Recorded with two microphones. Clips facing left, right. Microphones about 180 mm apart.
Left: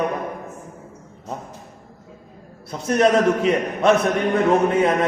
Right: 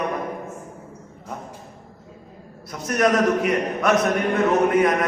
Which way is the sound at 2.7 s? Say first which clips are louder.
Left 3 dB; 25° left (ahead or behind).